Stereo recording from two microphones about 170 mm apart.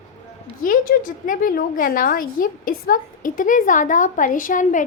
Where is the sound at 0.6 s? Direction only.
55° left (ahead or behind).